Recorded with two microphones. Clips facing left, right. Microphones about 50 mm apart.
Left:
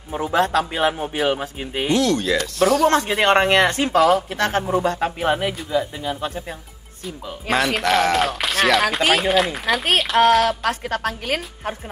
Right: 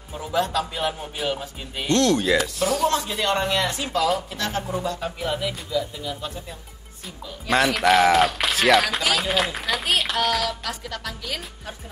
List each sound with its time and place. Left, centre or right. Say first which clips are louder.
0.1 s speech: left 5 dB; left
1.9 s speech: even; centre
3.1 s speech: left 7 dB; left
7.5 s speech: right 1 dB; centre
10.3 s speech: left 8 dB; left